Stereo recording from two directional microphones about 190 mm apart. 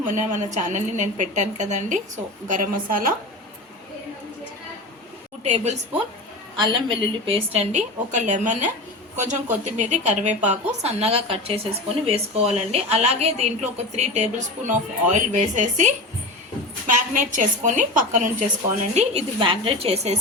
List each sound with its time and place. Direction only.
0.1 s a woman's voice: 40° right (ahead or behind)
5.4 s a woman's voice: 35° right (ahead or behind)
6.6 s a woman's voice: 25° right (ahead or behind); by 18.4 s 45° right (ahead or behind)
18.9 s a woman's voice: 30° right (ahead or behind)